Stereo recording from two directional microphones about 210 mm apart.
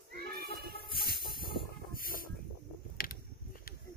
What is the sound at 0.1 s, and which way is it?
Child singing, 50° right (ahead or behind).